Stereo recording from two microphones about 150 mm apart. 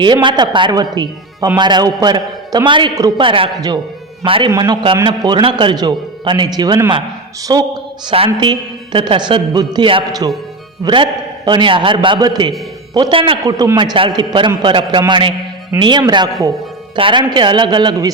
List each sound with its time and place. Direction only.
0.0 s a man's voice: 30° right (ahead or behind)
8.1 s a man's voice: 35° right (ahead or behind)
13.4 s a man's voice: 25° right (ahead or behind)